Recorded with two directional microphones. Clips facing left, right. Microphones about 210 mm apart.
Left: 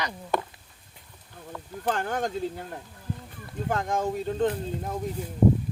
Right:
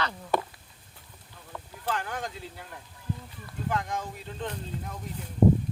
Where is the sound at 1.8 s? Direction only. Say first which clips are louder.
Left 5 dB; 45° left (ahead or behind).